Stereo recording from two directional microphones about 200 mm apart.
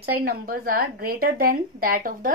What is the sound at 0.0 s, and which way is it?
Speech, 50° right (ahead or behind).